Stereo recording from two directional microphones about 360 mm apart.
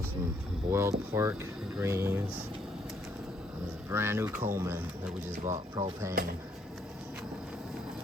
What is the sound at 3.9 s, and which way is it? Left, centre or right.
Speech, centre.